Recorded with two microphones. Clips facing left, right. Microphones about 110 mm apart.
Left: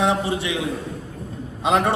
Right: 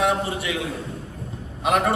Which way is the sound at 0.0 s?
25° left (ahead or behind).